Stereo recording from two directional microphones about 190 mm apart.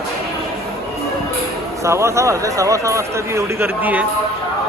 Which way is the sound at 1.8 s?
15° right (ahead or behind).